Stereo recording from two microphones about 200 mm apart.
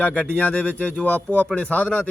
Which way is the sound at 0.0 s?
5° left (ahead or behind).